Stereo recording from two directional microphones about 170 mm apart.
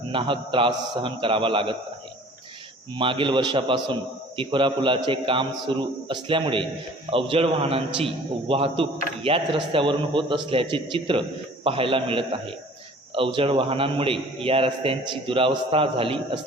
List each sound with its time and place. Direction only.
0.1 s a man's voice: 30° right (ahead or behind)
2.9 s a man's voice: 30° right (ahead or behind)